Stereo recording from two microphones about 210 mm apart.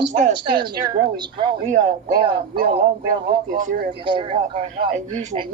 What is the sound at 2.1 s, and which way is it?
Speech, 20° right (ahead or behind).